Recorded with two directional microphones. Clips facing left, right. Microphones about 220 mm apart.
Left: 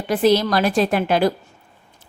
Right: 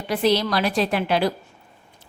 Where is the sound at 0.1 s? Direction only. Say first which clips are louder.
Left 4 dB; 45° left (ahead or behind).